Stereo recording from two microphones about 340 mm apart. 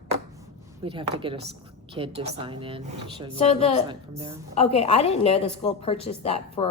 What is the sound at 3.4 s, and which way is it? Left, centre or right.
Speech, centre.